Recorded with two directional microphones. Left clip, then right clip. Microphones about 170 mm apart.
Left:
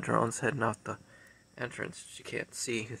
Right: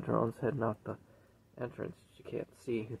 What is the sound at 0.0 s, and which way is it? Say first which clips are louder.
Speech: left 4 dB; 20° left (ahead or behind).